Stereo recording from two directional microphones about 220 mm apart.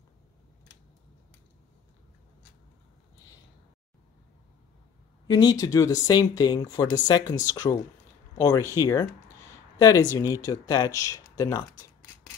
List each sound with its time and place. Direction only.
5.2 s speech: 20° left (ahead or behind)
9.8 s speech: 15° left (ahead or behind)